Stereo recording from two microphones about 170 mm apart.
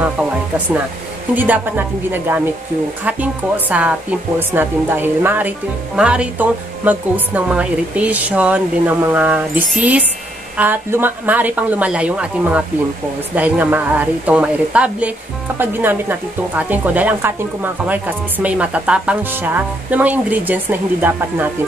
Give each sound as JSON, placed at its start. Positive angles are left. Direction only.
{"t": 1.3, "sound": "speech", "side_deg": -10}